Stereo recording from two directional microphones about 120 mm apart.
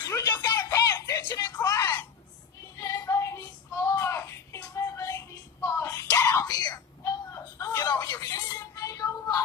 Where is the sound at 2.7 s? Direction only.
25° left (ahead or behind).